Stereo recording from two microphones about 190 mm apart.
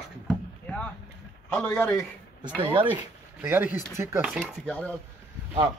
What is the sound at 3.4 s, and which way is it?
Speech, 10° right (ahead or behind).